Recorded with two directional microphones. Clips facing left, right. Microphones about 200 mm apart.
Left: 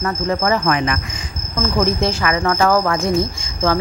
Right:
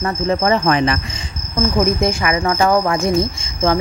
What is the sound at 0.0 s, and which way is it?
Speech, 25° right (ahead or behind).